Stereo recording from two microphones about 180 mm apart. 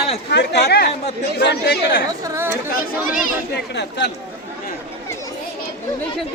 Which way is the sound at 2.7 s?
50° left (ahead or behind).